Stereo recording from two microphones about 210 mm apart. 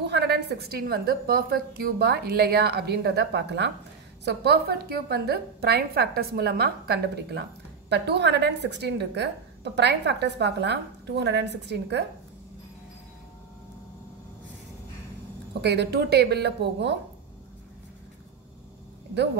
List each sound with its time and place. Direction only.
0.0 s a woman's voice: 50° right (ahead or behind)
15.6 s a woman's voice: 50° right (ahead or behind)